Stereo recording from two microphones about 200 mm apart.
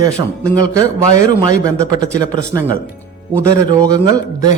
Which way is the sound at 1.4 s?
20° right (ahead or behind).